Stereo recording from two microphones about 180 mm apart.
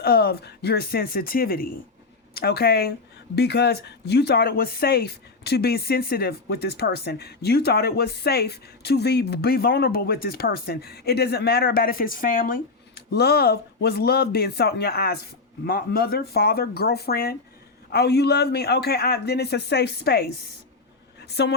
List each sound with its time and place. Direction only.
0.0 s speech: 60° left (ahead or behind)